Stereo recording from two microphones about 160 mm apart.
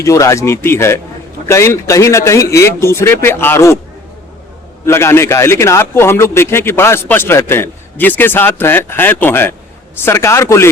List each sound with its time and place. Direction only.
0.0 s a man's voice: 20° left (ahead or behind)
4.9 s a man's voice: 15° left (ahead or behind)